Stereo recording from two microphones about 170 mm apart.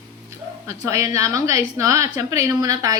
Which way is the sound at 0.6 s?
15° right (ahead or behind).